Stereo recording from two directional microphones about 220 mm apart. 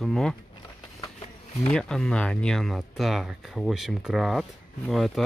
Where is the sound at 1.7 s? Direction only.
Centre (ahead or behind).